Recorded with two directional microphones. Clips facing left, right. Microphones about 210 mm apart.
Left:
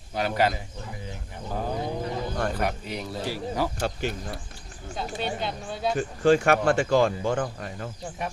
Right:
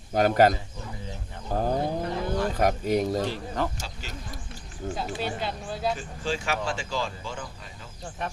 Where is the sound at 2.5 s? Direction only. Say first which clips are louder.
Right 6 dB; 45° right (ahead or behind).